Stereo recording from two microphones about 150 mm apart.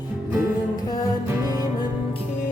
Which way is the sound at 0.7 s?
25° left (ahead or behind).